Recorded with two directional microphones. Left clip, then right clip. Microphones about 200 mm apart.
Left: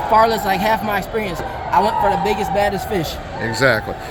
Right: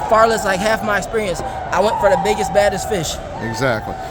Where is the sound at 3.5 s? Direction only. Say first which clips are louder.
Left 3 dB; 10° right (ahead or behind).